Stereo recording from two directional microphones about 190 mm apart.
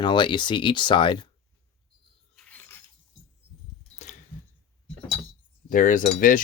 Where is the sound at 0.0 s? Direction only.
25° left (ahead or behind).